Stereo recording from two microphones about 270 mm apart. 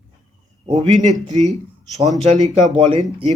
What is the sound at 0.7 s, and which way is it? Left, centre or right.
Speech, right.